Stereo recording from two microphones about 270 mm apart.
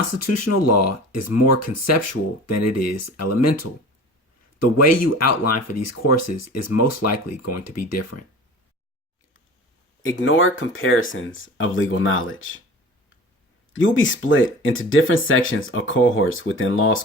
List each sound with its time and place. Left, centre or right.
0.2 s speech: left
10.0 s speech: left
13.7 s speech: left